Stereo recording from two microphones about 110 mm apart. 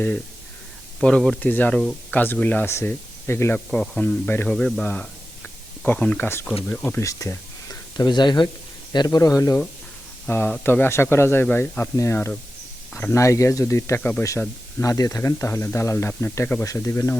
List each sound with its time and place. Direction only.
0.9 s speech: 5° left (ahead or behind)
1.4 s speech: 15° left (ahead or behind)
3.7 s speech: 5° left (ahead or behind)
7.0 s a man's voice: 30° left (ahead or behind)
10.2 s speech: 15° left (ahead or behind)
14.8 s a man's voice: 30° left (ahead or behind)